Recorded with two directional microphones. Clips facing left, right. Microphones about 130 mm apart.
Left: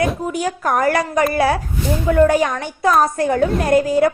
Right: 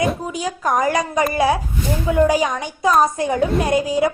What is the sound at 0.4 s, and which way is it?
A woman's voice, 15° right (ahead or behind).